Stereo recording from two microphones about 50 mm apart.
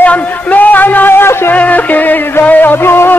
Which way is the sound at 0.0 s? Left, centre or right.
Left.